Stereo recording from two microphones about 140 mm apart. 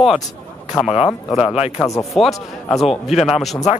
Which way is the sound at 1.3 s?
45° left (ahead or behind).